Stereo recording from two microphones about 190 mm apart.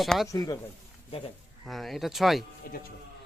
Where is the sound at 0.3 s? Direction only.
20° left (ahead or behind).